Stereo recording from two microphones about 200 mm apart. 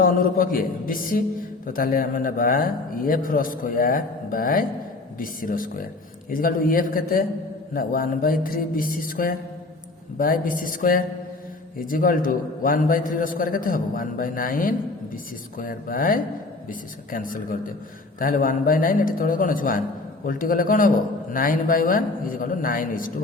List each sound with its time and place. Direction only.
0.0 s a man's voice: 45° left (ahead or behind)